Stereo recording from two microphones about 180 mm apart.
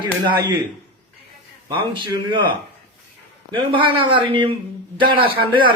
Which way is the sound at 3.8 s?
30° right (ahead or behind).